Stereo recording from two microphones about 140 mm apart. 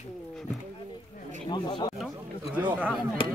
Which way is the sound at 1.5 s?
30° left (ahead or behind).